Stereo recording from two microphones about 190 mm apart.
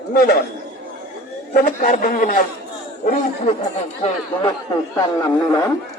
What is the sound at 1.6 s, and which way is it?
Speech, 45° left (ahead or behind).